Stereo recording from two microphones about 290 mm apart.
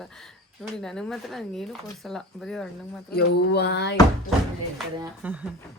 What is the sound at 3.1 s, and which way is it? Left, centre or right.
Speech, left.